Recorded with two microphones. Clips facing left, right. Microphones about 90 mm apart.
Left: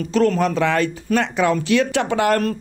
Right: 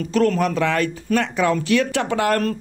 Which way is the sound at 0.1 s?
20° left (ahead or behind).